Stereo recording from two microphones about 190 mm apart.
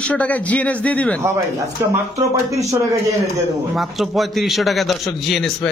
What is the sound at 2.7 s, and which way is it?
Speech, 15° right (ahead or behind).